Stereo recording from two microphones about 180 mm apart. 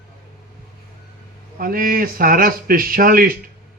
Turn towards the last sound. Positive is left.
turn(degrees=-55)  # may be behind; listen again after turning